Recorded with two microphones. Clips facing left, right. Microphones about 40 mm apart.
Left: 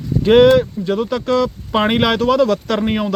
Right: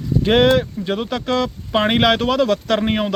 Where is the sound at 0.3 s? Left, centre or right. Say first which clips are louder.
Left 5 dB; centre.